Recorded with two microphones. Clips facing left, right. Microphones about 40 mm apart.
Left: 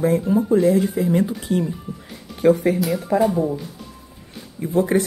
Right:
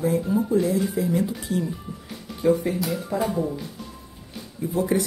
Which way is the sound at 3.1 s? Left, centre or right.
Left.